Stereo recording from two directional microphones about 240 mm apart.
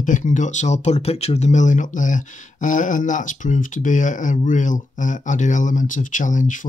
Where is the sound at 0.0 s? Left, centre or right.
Left.